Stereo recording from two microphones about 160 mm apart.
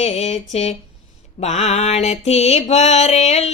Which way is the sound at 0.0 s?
45° left (ahead or behind).